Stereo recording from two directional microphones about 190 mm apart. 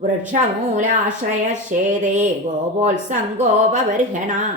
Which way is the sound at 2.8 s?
40° right (ahead or behind).